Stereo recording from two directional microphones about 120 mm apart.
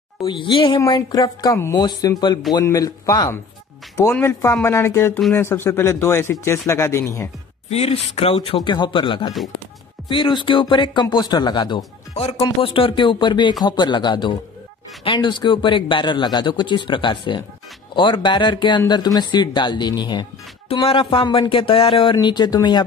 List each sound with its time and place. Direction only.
0.2 s speech: 45° left (ahead or behind); by 7.2 s 20° left (ahead or behind)
7.7 s speech: 60° left (ahead or behind)
8.6 s speech: 40° left (ahead or behind)
12.1 s speech: 65° left (ahead or behind)
12.4 s speech: 45° left (ahead or behind)
20.8 s speech: 50° left (ahead or behind)